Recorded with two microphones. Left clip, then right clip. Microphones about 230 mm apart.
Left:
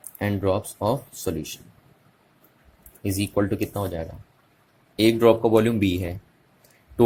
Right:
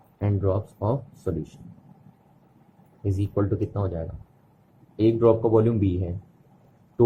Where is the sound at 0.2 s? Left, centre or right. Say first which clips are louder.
Left 3 dB; left.